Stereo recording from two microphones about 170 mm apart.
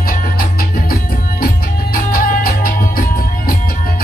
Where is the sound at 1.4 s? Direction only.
55° left (ahead or behind).